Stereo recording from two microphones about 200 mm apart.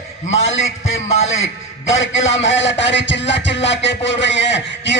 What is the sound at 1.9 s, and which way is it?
A man's voice, 70° left (ahead or behind).